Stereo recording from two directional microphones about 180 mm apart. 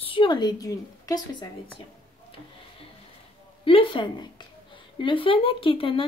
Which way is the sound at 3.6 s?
30° left (ahead or behind).